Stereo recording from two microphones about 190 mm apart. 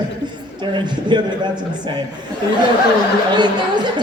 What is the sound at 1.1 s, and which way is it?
Speech, 25° right (ahead or behind).